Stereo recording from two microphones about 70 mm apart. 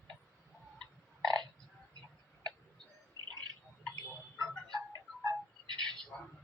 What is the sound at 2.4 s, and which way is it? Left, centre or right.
Tick-tock, centre.